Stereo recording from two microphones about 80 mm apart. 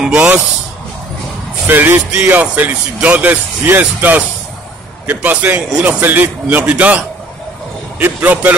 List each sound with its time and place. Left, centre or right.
0.0 s speech: centre
1.7 s a man's voice: right
8.0 s speech: right